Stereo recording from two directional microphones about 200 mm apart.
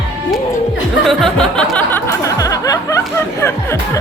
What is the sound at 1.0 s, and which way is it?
Music, 5° left (ahead or behind).